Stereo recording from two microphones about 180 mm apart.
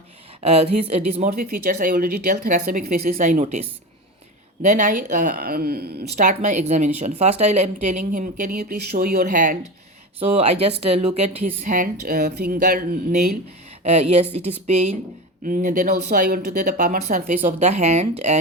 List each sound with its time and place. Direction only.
0.4 s speech: 35° right (ahead or behind)
1.7 s speech: 55° right (ahead or behind)
3.2 s speech: 40° right (ahead or behind); by 6.1 s 60° right (ahead or behind)
6.1 s speech: 45° right (ahead or behind)
10.2 s speech: 35° right (ahead or behind); by 13.3 s 55° right (ahead or behind)
13.8 s speech: 35° right (ahead or behind)
15.4 s speech: 50° right (ahead or behind)
17.4 s speech: 35° right (ahead or behind)